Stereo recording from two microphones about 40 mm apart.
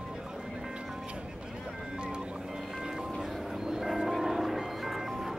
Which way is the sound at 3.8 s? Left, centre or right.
Centre.